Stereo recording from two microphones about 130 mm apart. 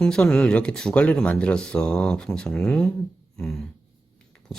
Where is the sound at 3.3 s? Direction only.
5° left (ahead or behind).